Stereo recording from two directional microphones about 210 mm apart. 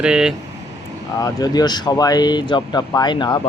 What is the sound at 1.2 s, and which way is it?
Speech, 20° left (ahead or behind).